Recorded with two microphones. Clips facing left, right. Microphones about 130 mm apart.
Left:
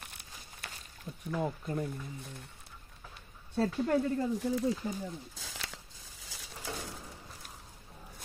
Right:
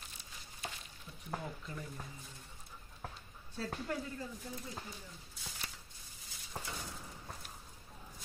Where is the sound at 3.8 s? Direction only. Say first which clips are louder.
Left 12 dB; 70° left (ahead or behind).